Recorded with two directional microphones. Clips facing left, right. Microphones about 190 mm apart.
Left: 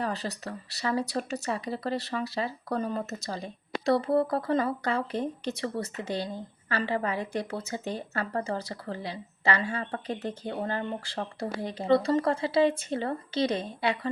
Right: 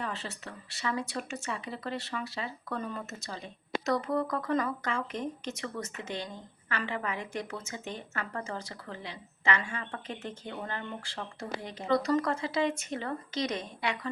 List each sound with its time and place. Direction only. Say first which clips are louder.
0.0 s speech: left 6 dB; 40° left (ahead or behind)